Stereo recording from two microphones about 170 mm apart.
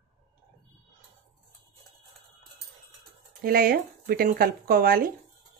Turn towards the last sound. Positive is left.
turn(degrees=-60)  # may be behind; listen again after turning